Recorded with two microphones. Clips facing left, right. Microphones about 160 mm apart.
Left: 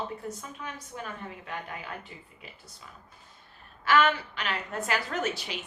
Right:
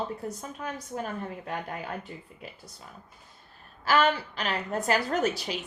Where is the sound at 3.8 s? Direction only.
35° right (ahead or behind).